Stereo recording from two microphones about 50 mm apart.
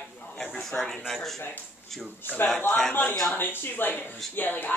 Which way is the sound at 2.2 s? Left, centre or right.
Left.